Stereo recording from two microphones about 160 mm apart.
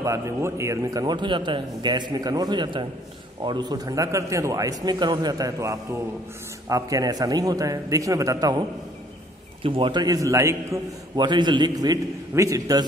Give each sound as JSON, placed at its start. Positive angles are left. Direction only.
{"t": 0.0, "sound": "a man's voice", "side_deg": -20}